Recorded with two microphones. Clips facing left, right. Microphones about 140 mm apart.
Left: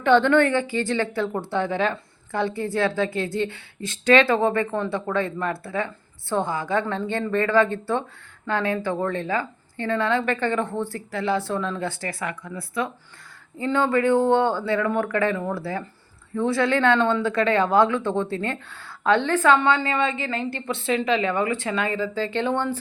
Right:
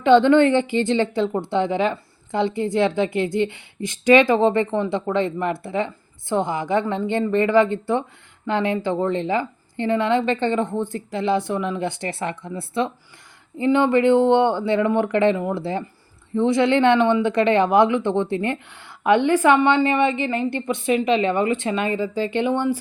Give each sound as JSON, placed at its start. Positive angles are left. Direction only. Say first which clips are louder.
{"t": 0.0, "sound": "speech", "louder": "right 4 dB", "side_deg": -15}